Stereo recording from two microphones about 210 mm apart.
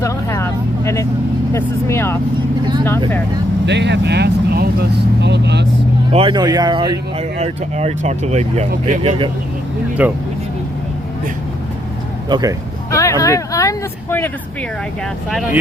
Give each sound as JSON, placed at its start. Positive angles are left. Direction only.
{"t": 0.0, "sound": "vehicle", "side_deg": 15}
{"t": 1.5, "sound": "speech", "side_deg": 10}
{"t": 3.7, "sound": "speech", "side_deg": -55}
{"t": 6.1, "sound": "speech", "side_deg": -20}
{"t": 7.3, "sound": "speech", "side_deg": -30}
{"t": 10.0, "sound": "speech", "side_deg": -5}
{"t": 12.3, "sound": "speech", "side_deg": -15}
{"t": 12.9, "sound": "speech", "side_deg": 15}